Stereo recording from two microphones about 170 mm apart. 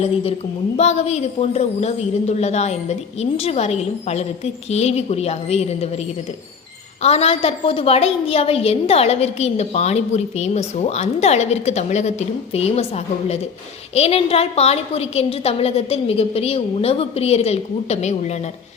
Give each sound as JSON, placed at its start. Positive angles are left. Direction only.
{"t": 0.8, "sound": "a woman's voice", "side_deg": 40}